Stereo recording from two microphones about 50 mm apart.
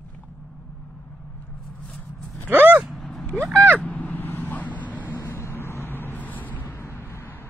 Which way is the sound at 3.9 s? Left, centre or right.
Left.